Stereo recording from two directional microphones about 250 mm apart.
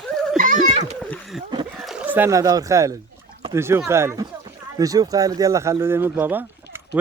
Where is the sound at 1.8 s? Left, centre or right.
Centre.